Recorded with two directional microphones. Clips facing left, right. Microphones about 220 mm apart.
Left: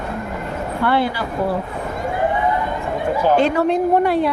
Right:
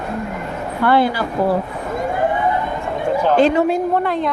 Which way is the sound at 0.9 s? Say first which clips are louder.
Right 4 dB; 45° right (ahead or behind).